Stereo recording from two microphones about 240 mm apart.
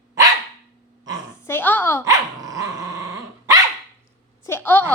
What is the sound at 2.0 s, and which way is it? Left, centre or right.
Dog, centre.